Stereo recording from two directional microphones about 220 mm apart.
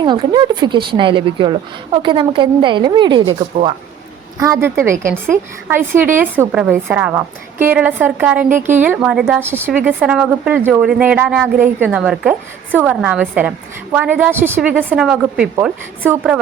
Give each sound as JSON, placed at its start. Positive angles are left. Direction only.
{"t": 0.0, "sound": "a woman's voice", "side_deg": -20}
{"t": 4.4, "sound": "a woman's voice", "side_deg": -15}